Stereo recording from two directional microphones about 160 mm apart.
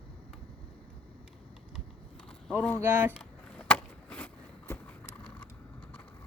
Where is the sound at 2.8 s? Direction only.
10° right (ahead or behind).